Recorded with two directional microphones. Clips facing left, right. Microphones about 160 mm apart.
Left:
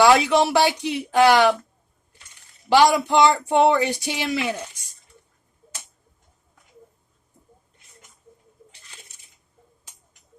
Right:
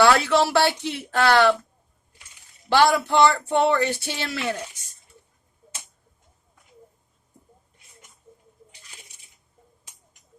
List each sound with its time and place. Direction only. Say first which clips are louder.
0.0 s speech: left 2 dB; 15° left (ahead or behind)
2.6 s speech: left 2 dB; 15° left (ahead or behind)